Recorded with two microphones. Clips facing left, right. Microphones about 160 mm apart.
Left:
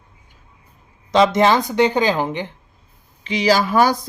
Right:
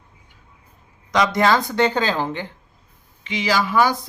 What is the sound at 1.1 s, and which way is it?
Speech, 25° left (ahead or behind).